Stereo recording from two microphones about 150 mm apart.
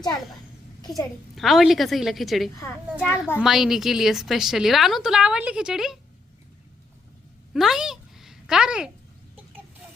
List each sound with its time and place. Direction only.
0.8 s a child's voice: 25° left (ahead or behind)
1.4 s a woman's voice: centre (ahead or behind)
3.0 s a child's voice: 15° left (ahead or behind)
3.4 s a woman's voice: centre (ahead or behind)
7.5 s a sound: centre (ahead or behind)